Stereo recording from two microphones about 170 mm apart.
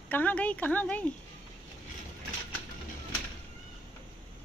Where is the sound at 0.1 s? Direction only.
10° left (ahead or behind).